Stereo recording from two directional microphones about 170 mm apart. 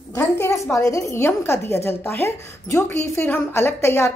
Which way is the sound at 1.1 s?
15° left (ahead or behind).